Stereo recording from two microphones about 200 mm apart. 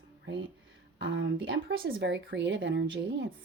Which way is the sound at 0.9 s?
70° right (ahead or behind).